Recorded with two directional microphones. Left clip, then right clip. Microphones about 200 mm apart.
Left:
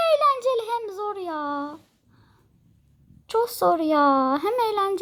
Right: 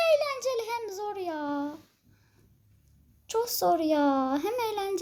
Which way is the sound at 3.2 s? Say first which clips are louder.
Left 5 dB; 40° left (ahead or behind).